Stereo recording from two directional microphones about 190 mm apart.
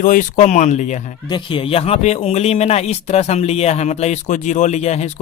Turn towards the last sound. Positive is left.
turn(degrees=35)  # may be behind; listen again after turning